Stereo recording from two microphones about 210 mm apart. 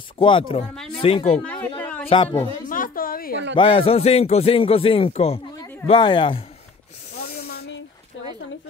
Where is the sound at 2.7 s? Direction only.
40° left (ahead or behind).